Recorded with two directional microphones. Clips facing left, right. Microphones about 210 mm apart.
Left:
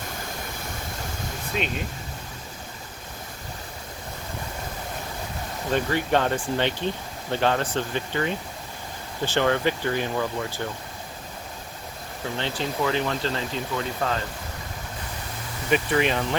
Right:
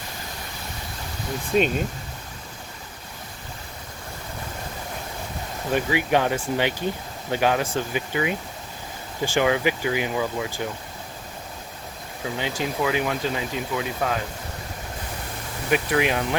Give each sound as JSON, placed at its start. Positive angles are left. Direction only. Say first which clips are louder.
{"t": 1.5, "sound": "speech", "louder": "right 9 dB", "side_deg": -40}
{"t": 5.7, "sound": "speech", "louder": "right 1 dB", "side_deg": -10}
{"t": 12.2, "sound": "speech", "louder": "right 1 dB", "side_deg": -10}
{"t": 15.7, "sound": "speech", "louder": "even", "side_deg": -5}